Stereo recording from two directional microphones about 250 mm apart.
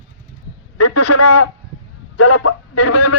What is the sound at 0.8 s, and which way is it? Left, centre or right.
Speech, left.